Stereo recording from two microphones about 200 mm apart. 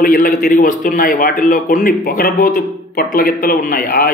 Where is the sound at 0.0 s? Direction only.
45° left (ahead or behind).